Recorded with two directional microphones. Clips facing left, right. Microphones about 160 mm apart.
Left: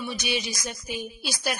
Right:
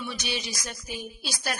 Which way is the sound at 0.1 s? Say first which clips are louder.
Left 4 dB; 15° left (ahead or behind).